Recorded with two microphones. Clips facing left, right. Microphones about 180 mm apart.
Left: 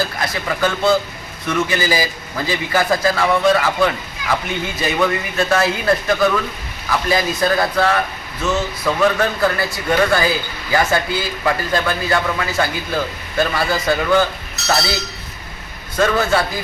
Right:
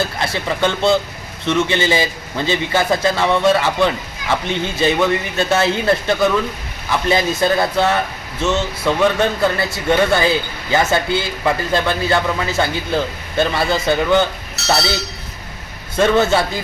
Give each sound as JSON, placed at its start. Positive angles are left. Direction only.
{"t": 0.0, "sound": "speech", "side_deg": -25}
{"t": 16.0, "sound": "speech", "side_deg": -25}